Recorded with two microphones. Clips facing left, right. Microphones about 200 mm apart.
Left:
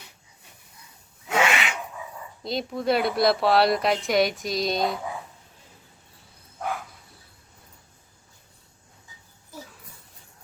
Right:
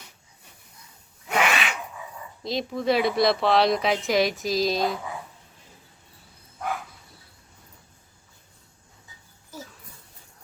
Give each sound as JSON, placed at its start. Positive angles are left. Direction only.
{"t": 1.3, "sound": "filing", "side_deg": 25}
{"t": 2.4, "sound": "a woman's voice", "side_deg": 0}